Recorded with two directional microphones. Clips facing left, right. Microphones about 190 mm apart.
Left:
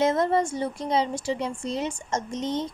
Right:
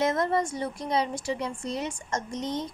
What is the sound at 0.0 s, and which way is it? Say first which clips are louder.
Speech: left 3 dB; 25° left (ahead or behind).